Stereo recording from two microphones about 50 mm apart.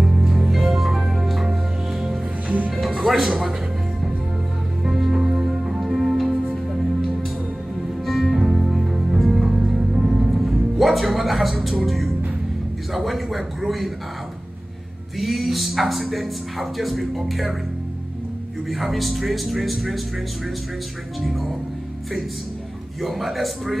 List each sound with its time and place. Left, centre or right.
0.0 s music: centre
2.4 s music: right
3.0 s music: centre
4.8 s music: centre
8.0 s music: centre
9.6 s music: centre
12.9 s a man's voice: centre
15.1 s speech: centre
18.7 s speech: centre
21.2 s speech: centre
22.9 s speech: centre